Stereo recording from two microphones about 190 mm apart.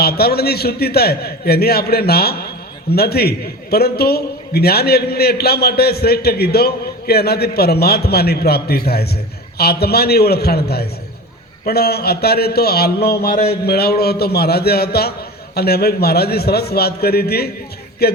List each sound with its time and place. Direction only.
0.0 s a man's voice: 55° left (ahead or behind)